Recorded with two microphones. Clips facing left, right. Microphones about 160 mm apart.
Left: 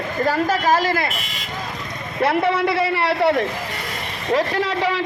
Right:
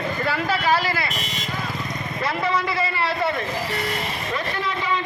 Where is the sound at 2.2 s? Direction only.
60° left (ahead or behind).